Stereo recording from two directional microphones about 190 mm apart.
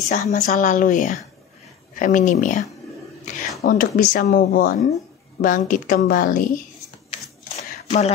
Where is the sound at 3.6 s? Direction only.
45° left (ahead or behind).